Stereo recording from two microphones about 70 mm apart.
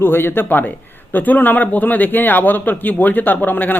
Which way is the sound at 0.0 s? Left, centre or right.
Left.